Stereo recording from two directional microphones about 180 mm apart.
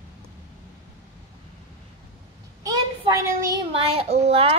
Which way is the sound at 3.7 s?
30° right (ahead or behind).